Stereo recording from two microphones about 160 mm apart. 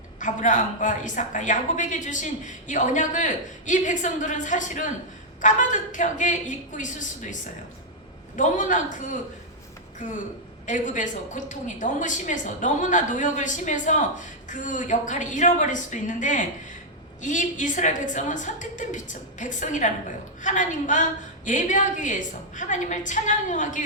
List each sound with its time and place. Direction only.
0.2 s a woman's voice: 50° left (ahead or behind)
8.4 s a woman's voice: 50° left (ahead or behind)
10.7 s a woman's voice: 50° left (ahead or behind)